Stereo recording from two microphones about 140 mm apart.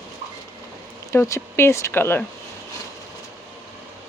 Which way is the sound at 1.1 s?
20° left (ahead or behind).